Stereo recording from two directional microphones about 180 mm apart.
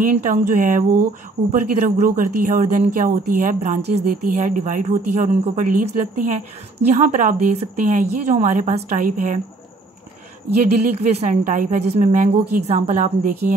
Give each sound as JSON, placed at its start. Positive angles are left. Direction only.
{"t": 0.0, "sound": "speech", "side_deg": -45}
{"t": 11.0, "sound": "a woman's voice", "side_deg": -35}